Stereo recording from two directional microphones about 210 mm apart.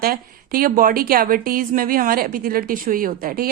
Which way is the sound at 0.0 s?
45° right (ahead or behind).